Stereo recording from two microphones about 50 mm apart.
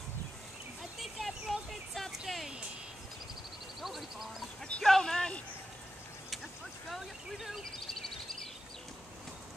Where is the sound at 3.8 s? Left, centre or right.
Centre.